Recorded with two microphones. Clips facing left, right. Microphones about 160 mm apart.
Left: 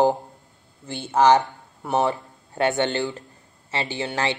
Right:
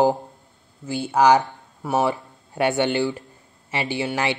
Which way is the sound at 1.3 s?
5° right (ahead or behind).